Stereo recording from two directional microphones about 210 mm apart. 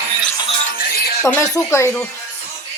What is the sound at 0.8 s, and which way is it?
Music, 45° left (ahead or behind).